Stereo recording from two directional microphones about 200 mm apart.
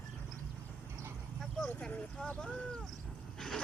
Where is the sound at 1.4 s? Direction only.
5° left (ahead or behind).